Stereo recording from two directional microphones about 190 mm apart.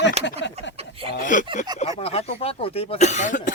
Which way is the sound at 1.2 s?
40° left (ahead or behind).